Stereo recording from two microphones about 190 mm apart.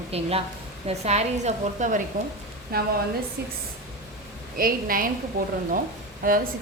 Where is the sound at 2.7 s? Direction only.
55° right (ahead or behind).